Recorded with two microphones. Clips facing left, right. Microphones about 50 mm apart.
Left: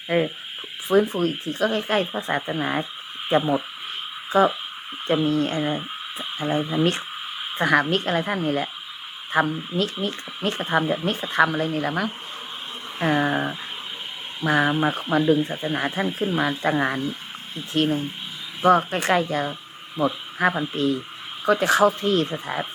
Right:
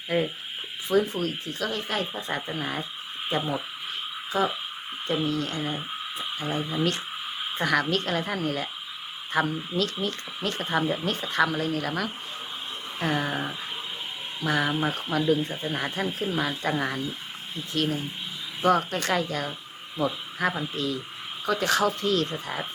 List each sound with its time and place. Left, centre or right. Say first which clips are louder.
0.1 s speech: left 4 dB; left
4.3 s speech: left 8 dB; left
18.6 s speech: left 5 dB; left
20.7 s speech: left 6 dB; left